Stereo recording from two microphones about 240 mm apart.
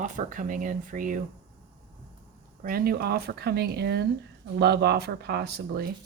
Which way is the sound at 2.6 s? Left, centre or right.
Right.